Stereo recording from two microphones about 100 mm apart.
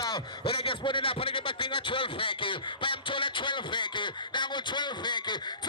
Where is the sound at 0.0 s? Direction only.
50° left (ahead or behind).